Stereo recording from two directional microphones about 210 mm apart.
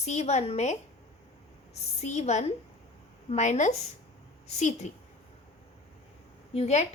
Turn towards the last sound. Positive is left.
turn(degrees=30)  # may be behind; listen again after turning